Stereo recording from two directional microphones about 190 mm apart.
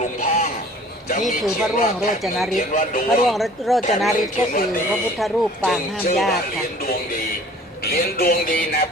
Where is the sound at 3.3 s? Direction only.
Centre (ahead or behind).